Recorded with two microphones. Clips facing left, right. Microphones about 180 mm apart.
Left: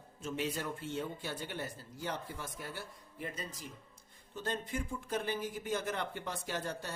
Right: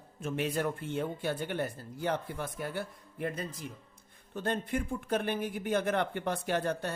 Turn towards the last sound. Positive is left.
turn(degrees=-60)  # may be behind; listen again after turning